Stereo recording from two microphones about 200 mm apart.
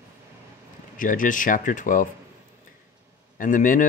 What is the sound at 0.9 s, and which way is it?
Speech, 40° left (ahead or behind).